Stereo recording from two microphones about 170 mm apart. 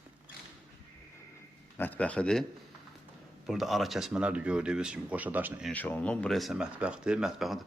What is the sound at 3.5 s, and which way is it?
Speech, centre (ahead or behind).